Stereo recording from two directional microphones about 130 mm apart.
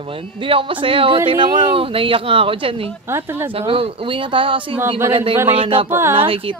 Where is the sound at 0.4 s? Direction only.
40° right (ahead or behind).